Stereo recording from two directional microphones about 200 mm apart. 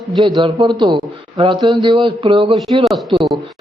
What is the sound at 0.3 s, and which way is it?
A man's voice, 25° right (ahead or behind).